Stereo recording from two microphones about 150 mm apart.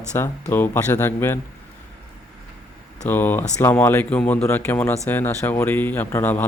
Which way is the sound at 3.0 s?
15° left (ahead or behind).